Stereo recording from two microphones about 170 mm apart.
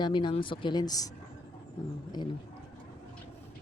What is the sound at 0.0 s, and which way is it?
Speech, 25° left (ahead or behind).